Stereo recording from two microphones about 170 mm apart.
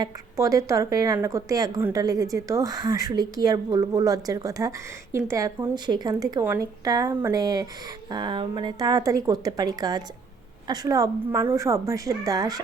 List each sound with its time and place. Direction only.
0.0 s a woman's voice: 20° right (ahead or behind)